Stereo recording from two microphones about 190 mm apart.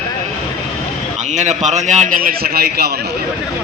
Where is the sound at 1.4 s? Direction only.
40° right (ahead or behind); by 2.9 s 55° right (ahead or behind).